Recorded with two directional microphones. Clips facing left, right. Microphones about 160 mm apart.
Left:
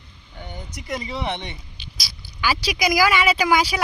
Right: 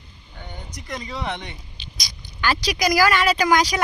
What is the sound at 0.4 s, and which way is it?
Speech, 5° left (ahead or behind).